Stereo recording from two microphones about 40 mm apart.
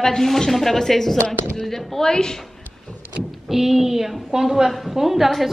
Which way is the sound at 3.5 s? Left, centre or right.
Centre.